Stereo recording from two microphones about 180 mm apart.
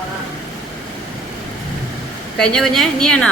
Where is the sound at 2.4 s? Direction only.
5° left (ahead or behind).